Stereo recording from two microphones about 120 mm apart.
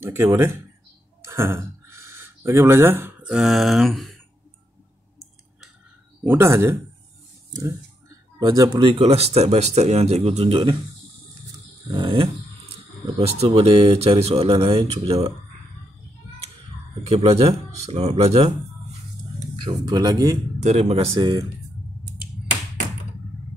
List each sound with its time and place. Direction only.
0.0 s speech: 20° right (ahead or behind); by 4.2 s centre (ahead or behind)
6.2 s speech: 20° right (ahead or behind)
8.4 s speech: 35° right (ahead or behind)
9.0 s speech: 60° right (ahead or behind)
11.9 s speech: 40° right (ahead or behind)
13.4 s speech: 55° right (ahead or behind)
17.1 s speech: 60° right (ahead or behind)
19.5 s speech: 40° right (ahead or behind)
20.6 s speech: 60° right (ahead or behind)